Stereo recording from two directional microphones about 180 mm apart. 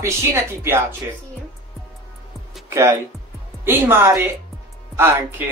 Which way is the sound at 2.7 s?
15° right (ahead or behind).